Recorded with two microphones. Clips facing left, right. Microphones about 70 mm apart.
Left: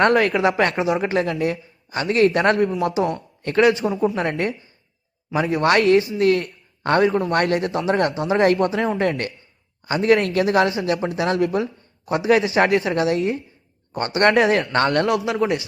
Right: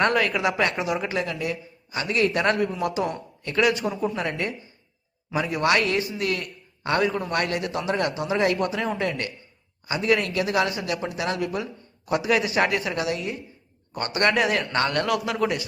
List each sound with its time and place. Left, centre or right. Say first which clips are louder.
0.0 s speech: left 5 dB; left